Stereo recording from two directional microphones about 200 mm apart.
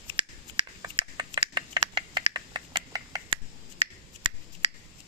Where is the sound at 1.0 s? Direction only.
25° right (ahead or behind).